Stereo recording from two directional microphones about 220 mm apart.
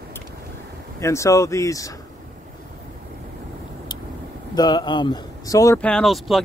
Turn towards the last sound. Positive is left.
turn(degrees=0)  # may be behind; listen again after turning